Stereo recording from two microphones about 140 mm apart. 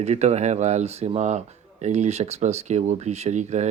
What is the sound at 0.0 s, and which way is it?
Speech, 50° right (ahead or behind).